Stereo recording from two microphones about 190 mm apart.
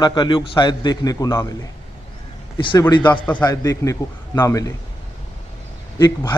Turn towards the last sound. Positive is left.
turn(degrees=20)  # may be behind; listen again after turning